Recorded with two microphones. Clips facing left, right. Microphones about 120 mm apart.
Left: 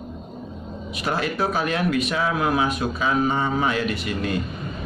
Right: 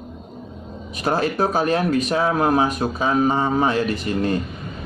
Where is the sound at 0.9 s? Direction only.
40° right (ahead or behind).